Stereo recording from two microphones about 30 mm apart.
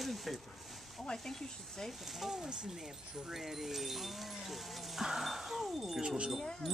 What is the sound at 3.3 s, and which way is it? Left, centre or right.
Speech, centre.